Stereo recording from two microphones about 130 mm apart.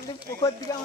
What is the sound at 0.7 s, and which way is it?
Speech, 25° left (ahead or behind).